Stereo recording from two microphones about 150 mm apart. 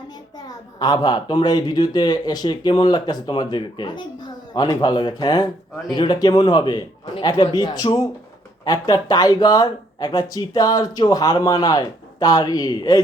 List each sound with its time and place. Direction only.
0.3 s a woman's voice: 25° left (ahead or behind)